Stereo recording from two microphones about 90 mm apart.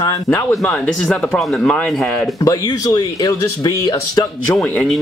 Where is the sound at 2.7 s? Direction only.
50° left (ahead or behind).